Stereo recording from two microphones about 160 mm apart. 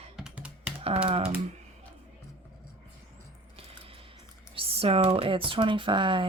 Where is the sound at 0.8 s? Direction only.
40° right (ahead or behind).